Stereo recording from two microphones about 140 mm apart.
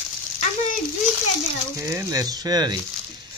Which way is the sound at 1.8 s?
20° right (ahead or behind).